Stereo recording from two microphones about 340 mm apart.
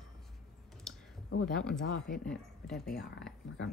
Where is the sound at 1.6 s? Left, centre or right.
Centre.